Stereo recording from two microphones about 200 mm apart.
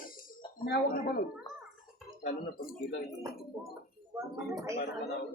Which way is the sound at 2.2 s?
45° left (ahead or behind).